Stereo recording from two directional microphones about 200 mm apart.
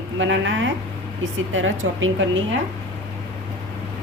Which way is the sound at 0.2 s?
65° right (ahead or behind).